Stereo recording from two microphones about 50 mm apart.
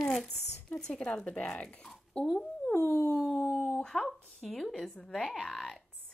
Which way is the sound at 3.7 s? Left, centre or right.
Centre.